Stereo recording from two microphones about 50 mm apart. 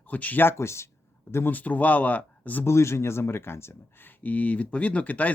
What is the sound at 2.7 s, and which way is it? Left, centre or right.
Speech, left.